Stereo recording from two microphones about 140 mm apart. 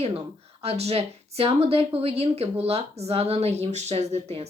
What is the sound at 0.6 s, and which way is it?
Speech, 45° right (ahead or behind).